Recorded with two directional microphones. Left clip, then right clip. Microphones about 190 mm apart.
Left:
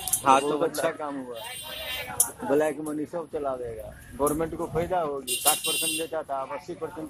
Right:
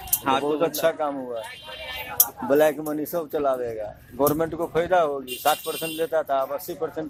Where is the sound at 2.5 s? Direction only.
25° right (ahead or behind).